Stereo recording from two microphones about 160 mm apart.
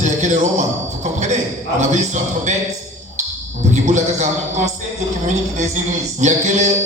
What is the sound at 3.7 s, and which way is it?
Speech, 45° right (ahead or behind).